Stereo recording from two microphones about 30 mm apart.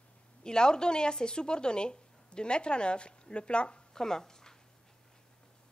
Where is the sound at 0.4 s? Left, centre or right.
Left.